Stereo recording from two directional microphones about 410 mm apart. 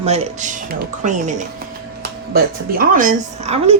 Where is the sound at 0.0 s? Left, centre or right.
Centre.